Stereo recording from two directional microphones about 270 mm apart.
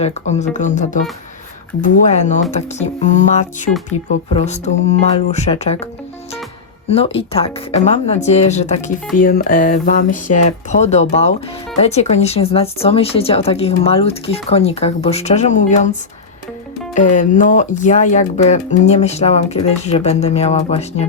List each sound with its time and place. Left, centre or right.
0.0 s speech: left
16.9 s speech: left